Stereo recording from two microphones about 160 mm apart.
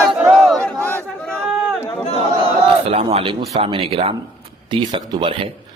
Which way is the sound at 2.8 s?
40° right (ahead or behind).